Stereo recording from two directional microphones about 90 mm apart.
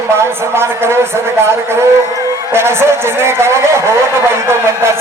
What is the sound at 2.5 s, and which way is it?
Speech, 30° right (ahead or behind).